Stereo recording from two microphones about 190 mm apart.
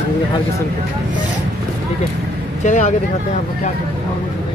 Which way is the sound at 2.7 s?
40° left (ahead or behind).